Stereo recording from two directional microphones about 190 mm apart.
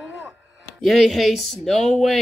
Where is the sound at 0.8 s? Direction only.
Centre (ahead or behind).